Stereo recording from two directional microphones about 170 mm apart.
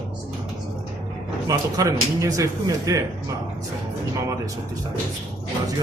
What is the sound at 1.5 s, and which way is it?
Speech, 20° right (ahead or behind).